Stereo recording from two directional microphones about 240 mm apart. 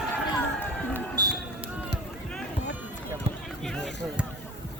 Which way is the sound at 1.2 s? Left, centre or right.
Centre.